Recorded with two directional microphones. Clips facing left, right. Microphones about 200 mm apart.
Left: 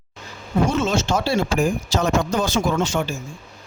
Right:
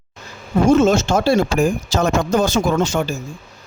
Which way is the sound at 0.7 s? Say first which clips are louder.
Right 11 dB; 45° right (ahead or behind).